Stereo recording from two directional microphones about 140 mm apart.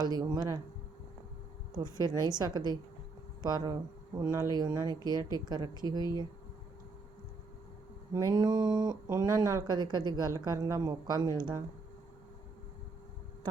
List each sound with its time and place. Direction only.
0.0 s speech: 30° right (ahead or behind)
1.7 s speech: 30° right (ahead or behind)
8.3 s speech: 25° right (ahead or behind)